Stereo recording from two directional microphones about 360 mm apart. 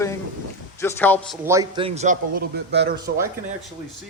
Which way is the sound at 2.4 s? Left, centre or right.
Right.